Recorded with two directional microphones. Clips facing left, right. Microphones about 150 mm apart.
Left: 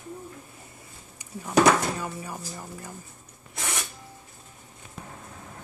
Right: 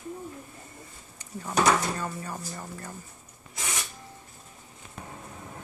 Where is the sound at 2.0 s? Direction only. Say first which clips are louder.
Even; 10° left (ahead or behind).